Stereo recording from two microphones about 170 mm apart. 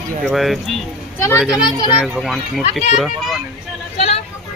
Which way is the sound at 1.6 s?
25° left (ahead or behind).